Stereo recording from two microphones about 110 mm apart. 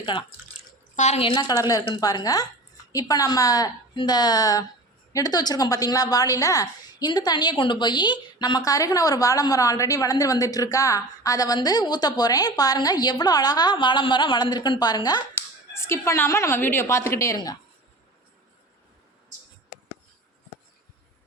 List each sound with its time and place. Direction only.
0.0 s speech: 45° left (ahead or behind)
0.9 s speech: 90° left
1.2 s a woman's voice: 40° left (ahead or behind)
15.7 s a woman's voice: 25° left (ahead or behind)